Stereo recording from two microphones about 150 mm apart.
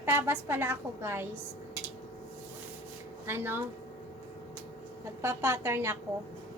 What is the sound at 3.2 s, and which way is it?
Speech, 15° right (ahead or behind).